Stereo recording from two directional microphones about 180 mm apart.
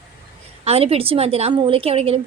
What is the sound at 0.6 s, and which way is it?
A woman's voice, 35° right (ahead or behind).